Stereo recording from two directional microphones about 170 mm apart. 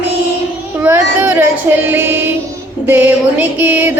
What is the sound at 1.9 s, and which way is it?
Music, 15° right (ahead or behind).